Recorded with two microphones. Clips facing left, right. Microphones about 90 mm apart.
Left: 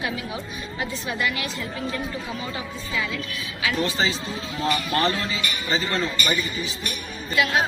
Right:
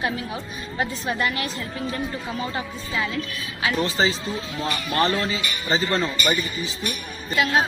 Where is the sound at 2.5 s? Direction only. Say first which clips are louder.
Right 2 dB; 40° right (ahead or behind).